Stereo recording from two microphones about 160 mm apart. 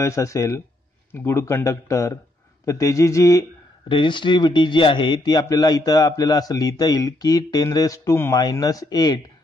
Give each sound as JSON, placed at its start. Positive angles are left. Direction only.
{"t": 0.0, "sound": "a man's voice", "side_deg": 20}
{"t": 3.9, "sound": "a man's voice", "side_deg": 30}